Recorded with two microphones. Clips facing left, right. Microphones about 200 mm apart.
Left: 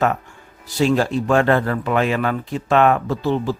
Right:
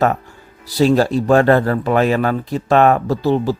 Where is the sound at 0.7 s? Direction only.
35° right (ahead or behind).